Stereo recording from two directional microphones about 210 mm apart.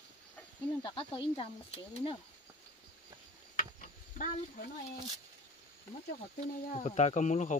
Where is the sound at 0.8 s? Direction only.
25° left (ahead or behind).